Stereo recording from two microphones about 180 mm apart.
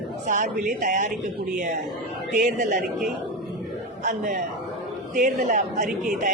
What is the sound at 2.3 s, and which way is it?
Speech, 45° right (ahead or behind).